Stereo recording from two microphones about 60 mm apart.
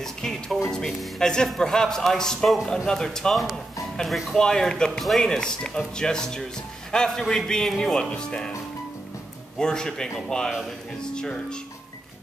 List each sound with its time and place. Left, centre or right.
0.0 s music: centre
1.2 s speech: centre
9.6 s speech: centre